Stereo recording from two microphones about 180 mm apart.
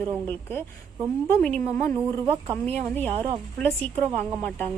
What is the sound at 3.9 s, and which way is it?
Speech, 35° right (ahead or behind).